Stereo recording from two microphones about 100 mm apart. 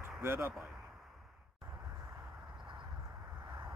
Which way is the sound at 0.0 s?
25° right (ahead or behind).